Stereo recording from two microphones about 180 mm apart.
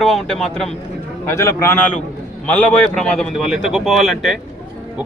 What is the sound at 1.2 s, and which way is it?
Speech, 15° left (ahead or behind).